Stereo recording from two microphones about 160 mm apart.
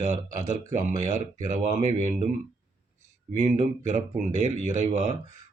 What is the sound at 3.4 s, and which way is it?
A man's voice, 50° right (ahead or behind).